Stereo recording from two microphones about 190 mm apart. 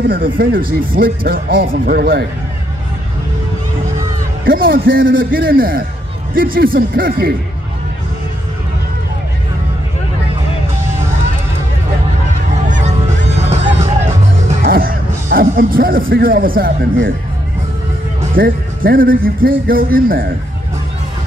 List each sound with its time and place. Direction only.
0.1 s speech: 50° right (ahead or behind)
4.5 s speech: 50° right (ahead or behind)
12.6 s honk: 45° right (ahead or behind)
14.5 s speech: 45° right (ahead or behind)
18.3 s speech: 50° right (ahead or behind)